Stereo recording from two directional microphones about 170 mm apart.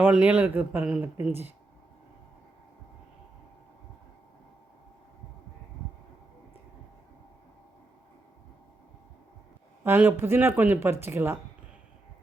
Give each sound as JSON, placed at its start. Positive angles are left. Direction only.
{"t": 0.0, "sound": "speech", "side_deg": -10}
{"t": 9.8, "sound": "speech", "side_deg": -15}